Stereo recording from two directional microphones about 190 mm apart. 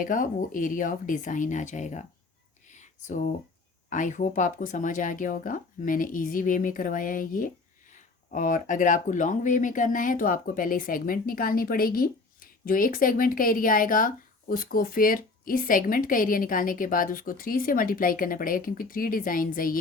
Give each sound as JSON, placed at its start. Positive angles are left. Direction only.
{"t": 0.0, "sound": "speech", "side_deg": 45}
{"t": 2.6, "sound": "a sound", "side_deg": 40}
{"t": 3.8, "sound": "speech", "side_deg": 40}